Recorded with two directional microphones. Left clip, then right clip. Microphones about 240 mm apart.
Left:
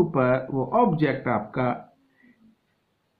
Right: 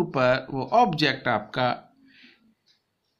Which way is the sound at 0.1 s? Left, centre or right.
Right.